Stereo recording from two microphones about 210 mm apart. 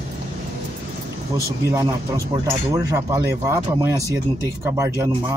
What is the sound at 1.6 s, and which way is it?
Speech, 15° right (ahead or behind).